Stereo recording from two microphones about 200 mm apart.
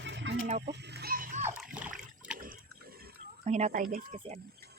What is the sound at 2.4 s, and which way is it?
Pig, 45° right (ahead or behind).